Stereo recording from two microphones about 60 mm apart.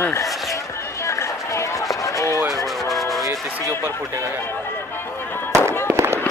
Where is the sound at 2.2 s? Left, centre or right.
Left.